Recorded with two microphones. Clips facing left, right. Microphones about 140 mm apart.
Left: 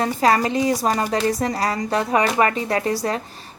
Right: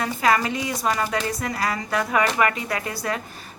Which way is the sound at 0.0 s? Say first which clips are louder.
Left 3 dB; 35° left (ahead or behind).